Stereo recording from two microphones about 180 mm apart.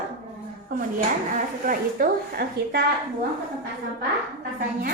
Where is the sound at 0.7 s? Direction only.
45° right (ahead or behind).